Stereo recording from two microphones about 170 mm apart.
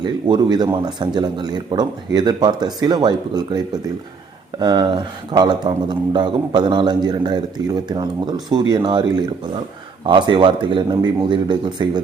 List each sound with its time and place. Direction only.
0.0 s a man's voice: 25° right (ahead or behind)
4.6 s a man's voice: 25° right (ahead or behind)